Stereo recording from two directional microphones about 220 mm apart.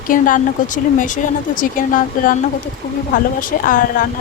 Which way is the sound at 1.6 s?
40° left (ahead or behind).